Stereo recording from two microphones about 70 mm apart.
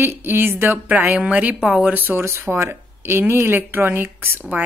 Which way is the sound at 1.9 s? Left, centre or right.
Right.